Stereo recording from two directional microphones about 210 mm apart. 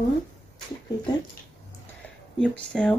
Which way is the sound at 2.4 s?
5° left (ahead or behind).